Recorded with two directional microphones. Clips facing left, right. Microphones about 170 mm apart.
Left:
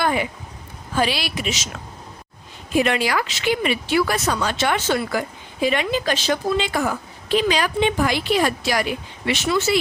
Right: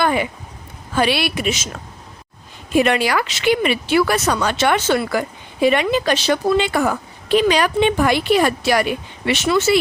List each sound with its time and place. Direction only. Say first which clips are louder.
0.0 s a sound: right 3 dB; 65° right (ahead or behind)
0.9 s speech: right 4 dB; 65° right (ahead or behind)
2.7 s speech: right 3 dB; 60° right (ahead or behind)